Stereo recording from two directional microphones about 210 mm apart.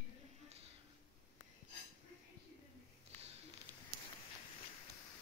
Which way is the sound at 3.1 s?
30° right (ahead or behind).